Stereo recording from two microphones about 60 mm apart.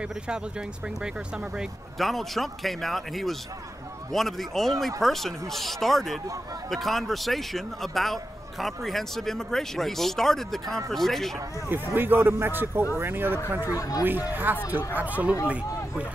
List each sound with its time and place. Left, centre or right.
0.0 s speech: centre
2.0 s a man's voice: centre
11.9 s a man's voice: right
13.7 s speech: left
14.0 s a man's voice: right